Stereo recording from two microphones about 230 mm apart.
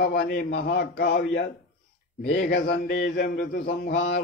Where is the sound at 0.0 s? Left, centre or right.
Left.